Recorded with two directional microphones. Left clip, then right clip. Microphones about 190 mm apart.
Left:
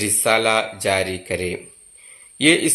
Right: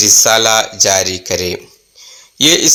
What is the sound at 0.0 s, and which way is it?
Speech, 20° right (ahead or behind).